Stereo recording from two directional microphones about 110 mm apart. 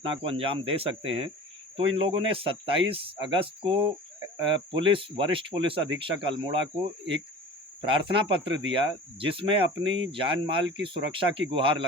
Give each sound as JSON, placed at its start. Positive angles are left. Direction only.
{"t": 0.0, "sound": "speech", "side_deg": -55}
{"t": 7.8, "sound": "speech", "side_deg": -50}